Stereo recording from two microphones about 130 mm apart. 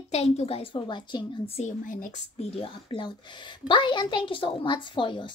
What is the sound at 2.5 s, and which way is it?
A woman's voice, 45° left (ahead or behind).